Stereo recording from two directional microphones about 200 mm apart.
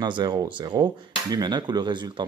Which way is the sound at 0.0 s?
20° right (ahead or behind).